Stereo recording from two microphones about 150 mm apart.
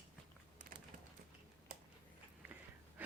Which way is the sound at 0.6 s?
60° right (ahead or behind).